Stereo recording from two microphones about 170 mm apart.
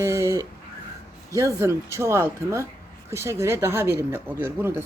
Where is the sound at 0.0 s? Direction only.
20° right (ahead or behind).